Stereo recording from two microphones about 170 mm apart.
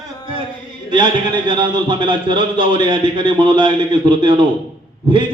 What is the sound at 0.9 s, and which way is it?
A man's voice, 25° right (ahead or behind).